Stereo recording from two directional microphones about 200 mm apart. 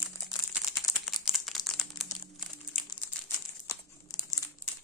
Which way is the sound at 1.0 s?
Centre (ahead or behind).